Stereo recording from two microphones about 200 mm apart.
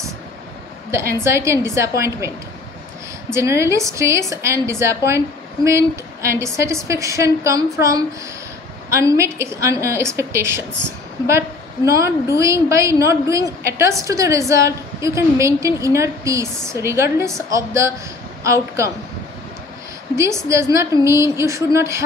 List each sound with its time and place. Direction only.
1.2 s a woman's voice: 15° right (ahead or behind)
3.3 s a woman's voice: 15° right (ahead or behind)
20.2 s a woman's voice: 15° right (ahead or behind)